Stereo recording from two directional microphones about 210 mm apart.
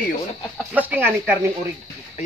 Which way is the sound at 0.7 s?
10° right (ahead or behind).